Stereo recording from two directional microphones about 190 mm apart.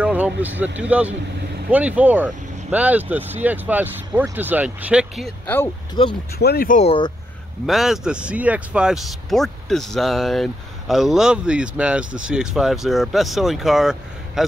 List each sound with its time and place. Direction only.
0.0 s speech: 10° right (ahead or behind)
6.0 s speech: 25° left (ahead or behind)
6.3 s speech: 55° left (ahead or behind)
6.8 s speech: 30° left (ahead or behind)
7.6 s speech: centre (ahead or behind)